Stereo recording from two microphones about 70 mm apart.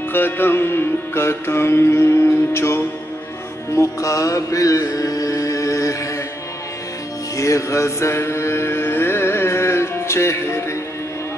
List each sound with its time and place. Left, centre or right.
0.1 s music: left
7.3 s mantra: left